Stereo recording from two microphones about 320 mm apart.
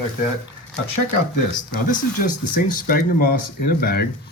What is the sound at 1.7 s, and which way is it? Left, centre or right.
Speech, left.